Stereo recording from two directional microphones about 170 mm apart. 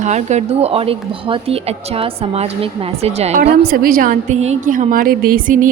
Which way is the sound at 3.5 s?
60° right (ahead or behind).